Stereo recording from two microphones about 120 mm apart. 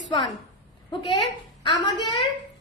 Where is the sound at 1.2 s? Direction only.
40° left (ahead or behind).